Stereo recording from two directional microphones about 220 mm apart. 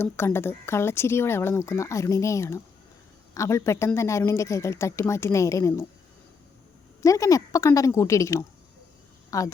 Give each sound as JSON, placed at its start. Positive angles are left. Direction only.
{"t": 0.0, "sound": "speech", "side_deg": 10}
{"t": 7.0, "sound": "speech", "side_deg": 15}